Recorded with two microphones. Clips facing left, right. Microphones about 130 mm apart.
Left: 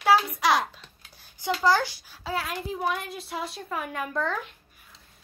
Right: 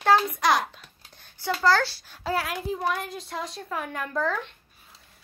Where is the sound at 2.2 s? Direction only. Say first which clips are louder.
Right 3 dB; centre (ahead or behind).